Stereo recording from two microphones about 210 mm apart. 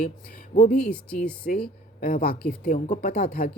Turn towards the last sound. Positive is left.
turn(degrees=45)  # may be behind; listen again after turning